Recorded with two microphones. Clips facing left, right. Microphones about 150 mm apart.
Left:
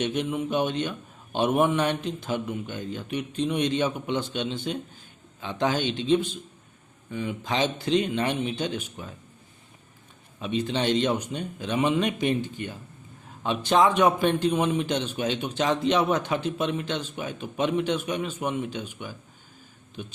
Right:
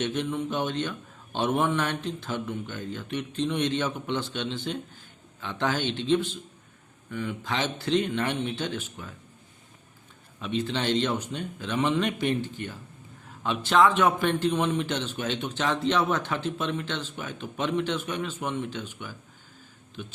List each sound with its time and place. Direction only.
0.0 s a man's voice: 15° left (ahead or behind)
10.4 s a man's voice: 15° left (ahead or behind)